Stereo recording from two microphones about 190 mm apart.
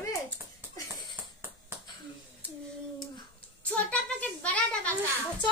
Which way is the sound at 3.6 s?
5° left (ahead or behind).